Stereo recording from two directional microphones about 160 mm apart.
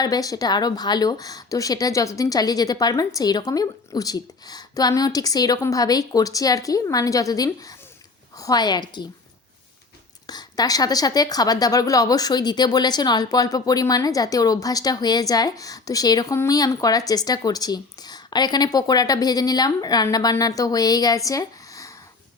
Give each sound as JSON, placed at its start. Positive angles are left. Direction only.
{"t": 0.0, "sound": "speech", "side_deg": 25}
{"t": 10.2, "sound": "speech", "side_deg": 25}